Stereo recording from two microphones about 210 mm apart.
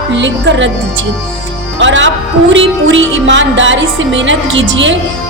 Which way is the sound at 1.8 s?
60° right (ahead or behind).